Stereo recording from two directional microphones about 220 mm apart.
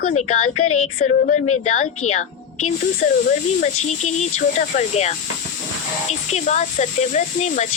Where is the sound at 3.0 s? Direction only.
35° left (ahead or behind).